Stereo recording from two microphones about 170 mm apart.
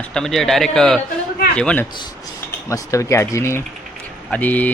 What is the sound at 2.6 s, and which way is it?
Speech, 20° left (ahead or behind).